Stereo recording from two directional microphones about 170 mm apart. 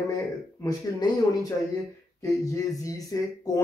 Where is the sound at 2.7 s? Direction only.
20° left (ahead or behind).